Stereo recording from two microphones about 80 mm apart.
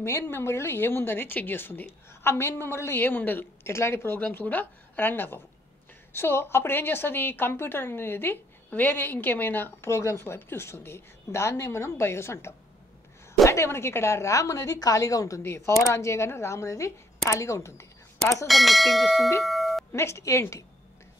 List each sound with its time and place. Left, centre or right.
0.0 s speech: left
15.4 s speech: left
18.5 s speech: centre
19.4 s doorbell: centre
19.9 s speech: left